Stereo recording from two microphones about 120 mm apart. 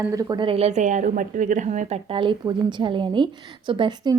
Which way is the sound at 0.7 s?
85° right.